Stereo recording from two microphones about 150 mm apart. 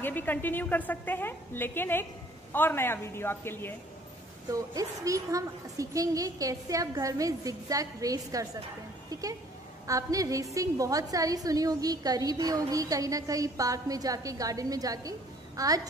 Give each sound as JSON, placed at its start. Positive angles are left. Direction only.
{"t": 0.0, "sound": "a woman's voice", "side_deg": 10}
{"t": 4.5, "sound": "a woman's voice", "side_deg": -25}